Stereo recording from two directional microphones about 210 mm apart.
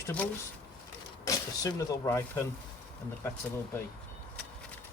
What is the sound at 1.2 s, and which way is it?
Speech, 15° left (ahead or behind).